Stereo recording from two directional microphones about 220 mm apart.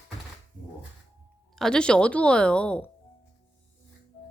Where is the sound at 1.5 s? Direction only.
5° left (ahead or behind).